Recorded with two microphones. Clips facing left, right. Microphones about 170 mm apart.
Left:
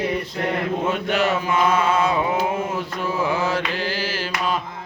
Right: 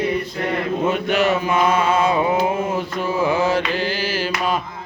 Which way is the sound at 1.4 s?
10° right (ahead or behind).